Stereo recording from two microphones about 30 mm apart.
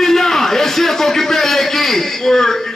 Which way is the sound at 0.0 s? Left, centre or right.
Centre.